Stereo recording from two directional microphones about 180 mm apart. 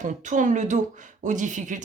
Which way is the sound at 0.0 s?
45° right (ahead or behind).